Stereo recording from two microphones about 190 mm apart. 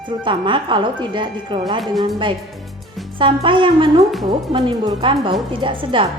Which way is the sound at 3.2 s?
25° right (ahead or behind).